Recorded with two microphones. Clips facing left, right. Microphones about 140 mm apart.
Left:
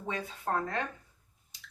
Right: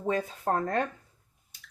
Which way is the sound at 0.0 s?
45° right (ahead or behind).